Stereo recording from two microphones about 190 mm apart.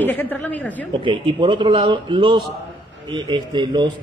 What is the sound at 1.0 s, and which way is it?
Mantra, 25° right (ahead or behind).